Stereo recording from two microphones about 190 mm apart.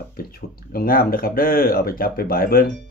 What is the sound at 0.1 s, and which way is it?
Speech, 50° left (ahead or behind).